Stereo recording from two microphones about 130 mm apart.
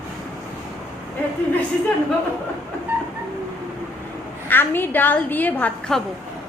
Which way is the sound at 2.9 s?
15° right (ahead or behind).